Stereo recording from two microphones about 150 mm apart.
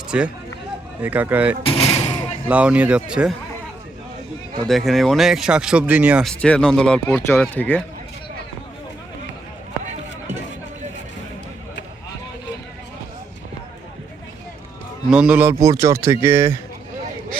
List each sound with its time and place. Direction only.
0.1 s speech: 5° right (ahead or behind)
1.6 s a sound: 40° left (ahead or behind)
2.5 s speech: 10° right (ahead or behind)
4.7 s speech: centre (ahead or behind)
6.2 s speech: 5° left (ahead or behind)
15.1 s speech: 10° right (ahead or behind)